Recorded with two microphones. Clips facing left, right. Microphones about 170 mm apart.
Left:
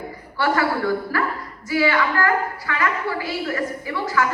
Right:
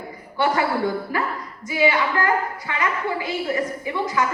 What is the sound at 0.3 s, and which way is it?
Speech, 20° right (ahead or behind).